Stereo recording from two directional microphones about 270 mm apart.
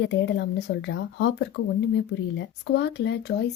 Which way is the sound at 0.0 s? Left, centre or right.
Left.